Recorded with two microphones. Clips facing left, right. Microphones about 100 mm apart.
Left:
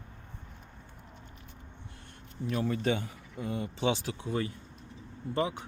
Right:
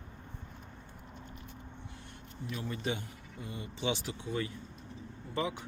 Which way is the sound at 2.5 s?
65° left (ahead or behind).